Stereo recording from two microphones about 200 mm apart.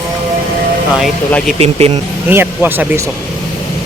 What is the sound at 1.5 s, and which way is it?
Speech, 30° right (ahead or behind).